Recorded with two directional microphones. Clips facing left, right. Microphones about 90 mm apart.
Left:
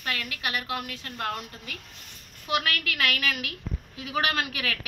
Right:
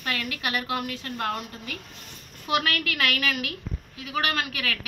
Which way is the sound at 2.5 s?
15° left (ahead or behind).